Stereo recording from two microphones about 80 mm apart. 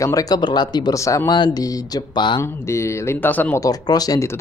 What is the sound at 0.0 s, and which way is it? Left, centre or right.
Speech, left.